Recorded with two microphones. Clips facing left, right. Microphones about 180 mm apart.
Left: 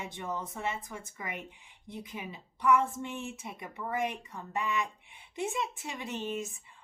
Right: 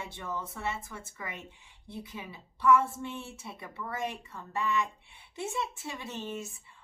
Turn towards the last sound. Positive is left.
turn(degrees=15)  # may be behind; listen again after turning